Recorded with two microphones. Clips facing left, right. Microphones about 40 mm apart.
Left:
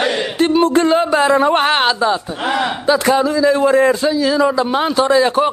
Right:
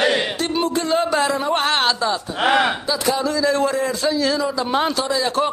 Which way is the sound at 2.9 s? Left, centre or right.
Left.